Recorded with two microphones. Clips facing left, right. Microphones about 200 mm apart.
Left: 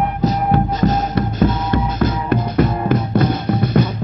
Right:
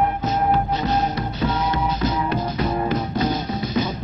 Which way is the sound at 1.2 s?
50° left (ahead or behind).